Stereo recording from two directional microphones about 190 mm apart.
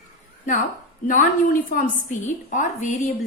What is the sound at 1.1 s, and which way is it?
A woman's voice, 45° left (ahead or behind).